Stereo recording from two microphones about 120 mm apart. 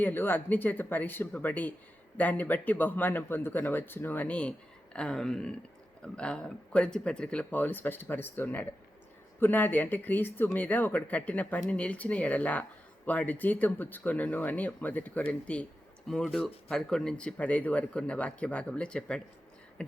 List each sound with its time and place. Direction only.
0.0 s speech: 15° left (ahead or behind)